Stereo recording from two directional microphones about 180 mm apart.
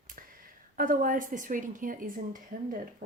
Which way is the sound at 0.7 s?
50° right (ahead or behind).